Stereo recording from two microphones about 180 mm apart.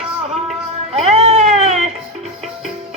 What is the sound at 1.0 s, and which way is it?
Music, 35° right (ahead or behind).